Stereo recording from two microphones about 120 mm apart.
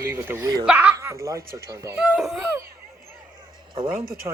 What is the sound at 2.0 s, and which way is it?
Speech, 5° right (ahead or behind).